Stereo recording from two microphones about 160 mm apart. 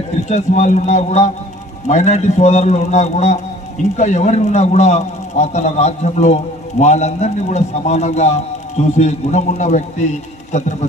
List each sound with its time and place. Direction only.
0.2 s a man's voice: 45° left (ahead or behind)